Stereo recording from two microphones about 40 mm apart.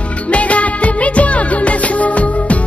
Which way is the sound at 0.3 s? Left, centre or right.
Left.